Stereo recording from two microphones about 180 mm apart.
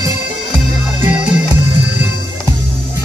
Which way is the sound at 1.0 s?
10° right (ahead or behind).